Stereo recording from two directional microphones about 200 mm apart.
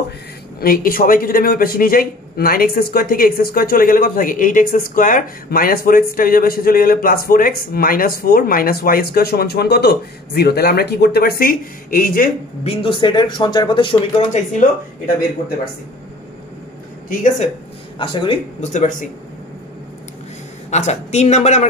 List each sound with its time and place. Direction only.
0.6 s a man's voice: 45° left (ahead or behind)
12.6 s speech: 25° left (ahead or behind)
14.3 s speech: 40° left (ahead or behind)
17.1 s speech: 40° left (ahead or behind)
17.9 s speech: 25° left (ahead or behind)
20.7 s speech: 35° left (ahead or behind)